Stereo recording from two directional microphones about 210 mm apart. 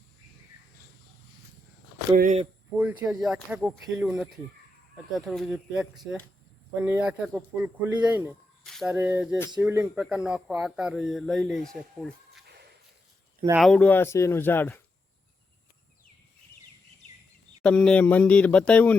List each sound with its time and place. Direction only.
2.1 s speech: 40° right (ahead or behind)
2.7 s speech: 10° right (ahead or behind)
13.6 s speech: 5° left (ahead or behind)
17.6 s speech: 5° left (ahead or behind)